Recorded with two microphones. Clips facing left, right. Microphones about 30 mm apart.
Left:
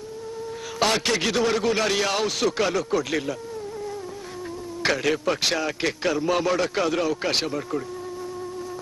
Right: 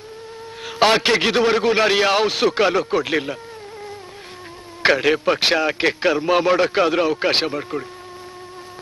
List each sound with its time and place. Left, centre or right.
0.7 s a man's voice: right
4.8 s a man's voice: right